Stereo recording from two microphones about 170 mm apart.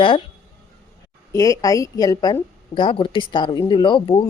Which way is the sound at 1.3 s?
20° left (ahead or behind).